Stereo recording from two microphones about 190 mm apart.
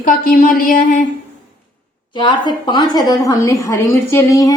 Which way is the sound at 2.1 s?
25° left (ahead or behind).